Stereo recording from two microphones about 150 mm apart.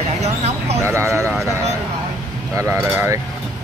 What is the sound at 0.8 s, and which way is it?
Speech, 20° right (ahead or behind).